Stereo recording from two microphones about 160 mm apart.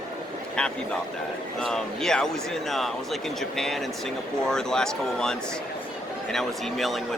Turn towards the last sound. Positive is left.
turn(degrees=0)  # may be behind; listen again after turning